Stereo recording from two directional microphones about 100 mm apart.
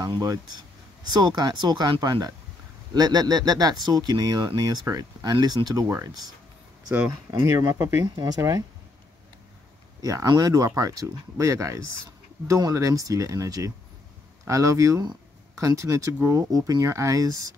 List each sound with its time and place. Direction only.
0.0 s speech: 40° right (ahead or behind)
7.2 s speech: 35° right (ahead or behind)
8.0 s speech: 40° right (ahead or behind)
8.4 s speech: 30° right (ahead or behind)
10.0 s speech: 40° right (ahead or behind)